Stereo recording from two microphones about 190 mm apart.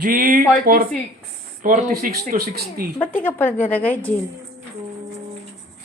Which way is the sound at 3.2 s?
10° left (ahead or behind).